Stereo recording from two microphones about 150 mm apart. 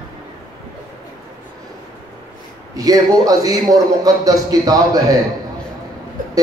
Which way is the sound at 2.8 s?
25° right (ahead or behind).